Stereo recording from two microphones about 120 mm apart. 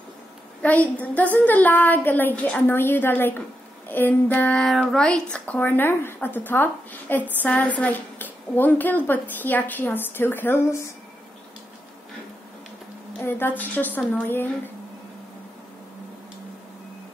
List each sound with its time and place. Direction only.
0.6 s speech: 10° left (ahead or behind)
13.2 s speech: 15° left (ahead or behind)